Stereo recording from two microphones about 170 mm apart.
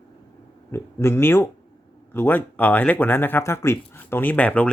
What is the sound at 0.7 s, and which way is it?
Speech, 15° left (ahead or behind).